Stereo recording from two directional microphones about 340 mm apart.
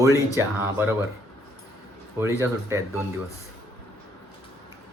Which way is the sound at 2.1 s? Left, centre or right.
Centre.